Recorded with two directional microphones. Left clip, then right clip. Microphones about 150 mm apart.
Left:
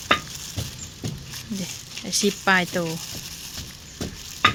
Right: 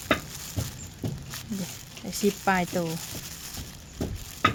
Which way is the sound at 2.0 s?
10° right (ahead or behind).